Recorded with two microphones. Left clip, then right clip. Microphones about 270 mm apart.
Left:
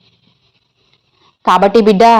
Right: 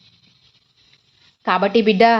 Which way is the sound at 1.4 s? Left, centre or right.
Centre.